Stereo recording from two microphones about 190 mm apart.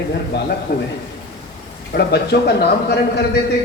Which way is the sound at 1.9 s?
60° left (ahead or behind).